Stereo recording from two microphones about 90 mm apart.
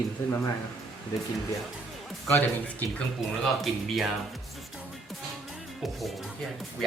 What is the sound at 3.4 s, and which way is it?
Speech, centre (ahead or behind).